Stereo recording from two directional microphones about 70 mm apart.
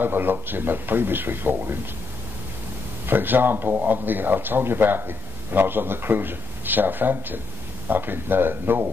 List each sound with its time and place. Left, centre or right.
0.0 s speech: right
3.1 s speech: right